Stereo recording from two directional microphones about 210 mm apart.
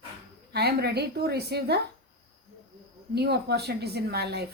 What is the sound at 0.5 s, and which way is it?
A woman's voice, 50° right (ahead or behind).